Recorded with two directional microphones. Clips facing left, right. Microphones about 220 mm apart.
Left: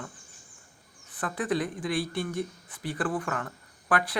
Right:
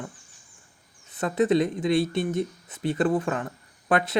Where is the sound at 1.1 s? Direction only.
25° right (ahead or behind).